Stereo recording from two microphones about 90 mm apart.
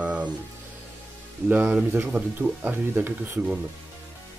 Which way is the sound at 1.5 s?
15° right (ahead or behind).